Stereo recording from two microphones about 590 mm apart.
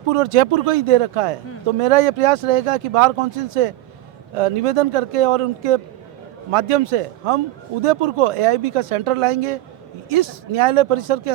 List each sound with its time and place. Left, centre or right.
0.1 s a man's voice: right